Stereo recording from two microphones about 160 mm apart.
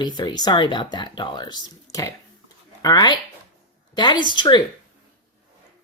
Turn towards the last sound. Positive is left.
turn(degrees=30)  # may be behind; listen again after turning